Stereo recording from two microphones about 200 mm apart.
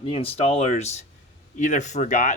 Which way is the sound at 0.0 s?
30° left (ahead or behind).